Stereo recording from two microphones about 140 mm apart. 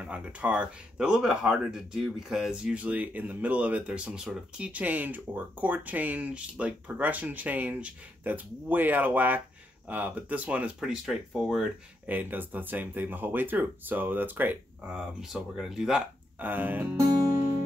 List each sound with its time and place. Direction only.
0.0 s speech: 10° right (ahead or behind)
12.1 s speech: 15° right (ahead or behind)